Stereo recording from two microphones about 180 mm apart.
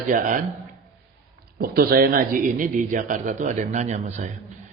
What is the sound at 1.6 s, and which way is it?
A man's voice, 55° right (ahead or behind).